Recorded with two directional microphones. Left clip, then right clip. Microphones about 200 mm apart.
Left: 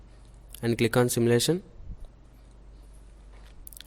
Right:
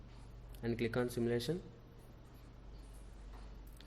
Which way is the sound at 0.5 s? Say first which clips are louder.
Left 13 dB; 50° left (ahead or behind).